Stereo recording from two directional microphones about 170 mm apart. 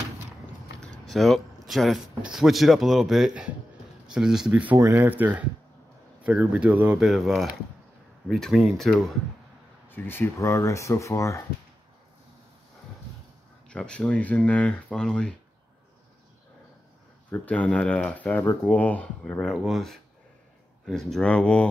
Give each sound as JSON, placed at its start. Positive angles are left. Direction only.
{"t": 0.7, "sound": "speech", "side_deg": 5}
{"t": 9.8, "sound": "speech", "side_deg": 10}
{"t": 13.7, "sound": "speech", "side_deg": 5}
{"t": 17.3, "sound": "speech", "side_deg": 10}